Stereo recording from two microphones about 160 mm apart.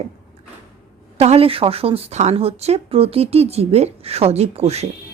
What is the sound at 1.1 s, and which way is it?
A woman's voice, 40° right (ahead or behind).